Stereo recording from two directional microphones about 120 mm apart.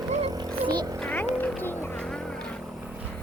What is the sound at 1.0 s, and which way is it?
Vehicle, 15° left (ahead or behind).